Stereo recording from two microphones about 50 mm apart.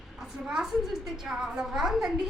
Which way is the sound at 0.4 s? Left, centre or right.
Centre.